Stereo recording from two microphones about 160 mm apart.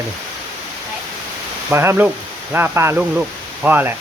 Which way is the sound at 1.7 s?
15° right (ahead or behind).